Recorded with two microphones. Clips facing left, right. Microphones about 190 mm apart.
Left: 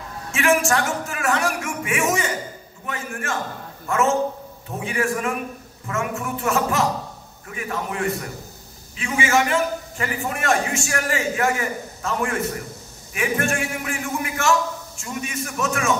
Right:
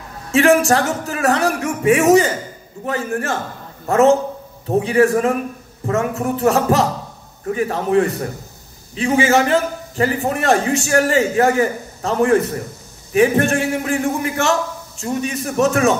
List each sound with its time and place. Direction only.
0.3 s a man's voice: 35° right (ahead or behind)